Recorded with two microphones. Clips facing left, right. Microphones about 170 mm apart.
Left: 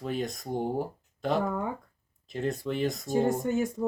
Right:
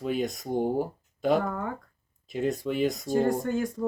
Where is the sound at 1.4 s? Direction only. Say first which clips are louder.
Left 1 dB; 15° left (ahead or behind).